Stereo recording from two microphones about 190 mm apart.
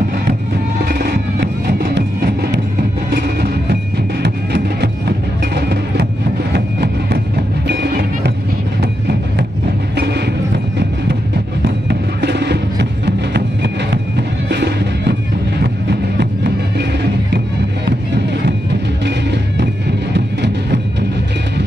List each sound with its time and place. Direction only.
0.8 s music: 55° right (ahead or behind)
6.5 s music: 60° right (ahead or behind)
9.9 s music: 60° right (ahead or behind)
11.6 s music: 60° right (ahead or behind)
14.5 s music: 60° right (ahead or behind)
19.0 s music: 65° right (ahead or behind)